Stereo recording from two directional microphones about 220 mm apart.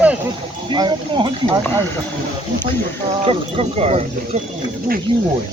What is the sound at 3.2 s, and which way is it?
Speech, 30° right (ahead or behind).